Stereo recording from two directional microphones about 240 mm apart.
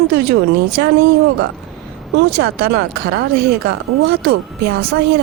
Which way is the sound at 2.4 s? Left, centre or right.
Right.